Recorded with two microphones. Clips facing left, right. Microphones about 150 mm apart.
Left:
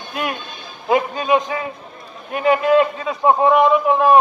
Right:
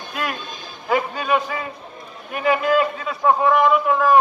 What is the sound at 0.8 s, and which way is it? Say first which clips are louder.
Music: left 4 dB; 20° left (ahead or behind).